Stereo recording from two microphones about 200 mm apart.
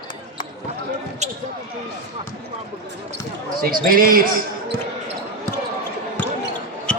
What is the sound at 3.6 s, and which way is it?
Speech, 45° right (ahead or behind).